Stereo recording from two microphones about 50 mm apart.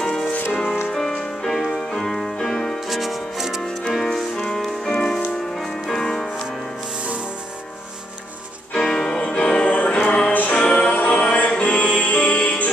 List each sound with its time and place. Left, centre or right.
0.0 s music: centre
0.3 s music: left
0.9 s music: centre
2.9 s music: centre
3.6 s music: centre
8.7 s music: centre; by 12.6 s left